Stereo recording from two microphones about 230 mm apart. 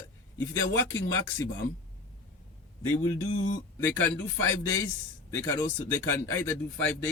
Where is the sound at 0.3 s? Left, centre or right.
Centre.